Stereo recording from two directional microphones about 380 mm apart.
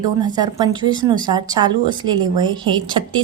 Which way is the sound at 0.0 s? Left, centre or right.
Centre.